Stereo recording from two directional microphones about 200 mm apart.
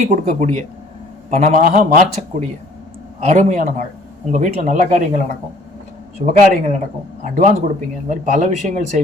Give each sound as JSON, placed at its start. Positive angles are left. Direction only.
{"t": 0.0, "sound": "speech", "side_deg": -35}